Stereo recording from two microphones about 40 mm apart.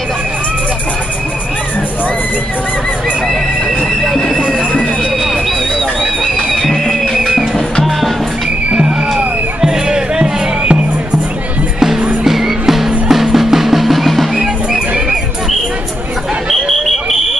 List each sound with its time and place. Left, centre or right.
6.5 s a sound: centre
7.2 s music: centre
9.1 s music: centre
12.3 s music: centre
14.3 s music: centre